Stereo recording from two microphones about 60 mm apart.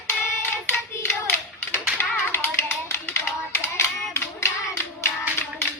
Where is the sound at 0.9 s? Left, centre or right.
Left.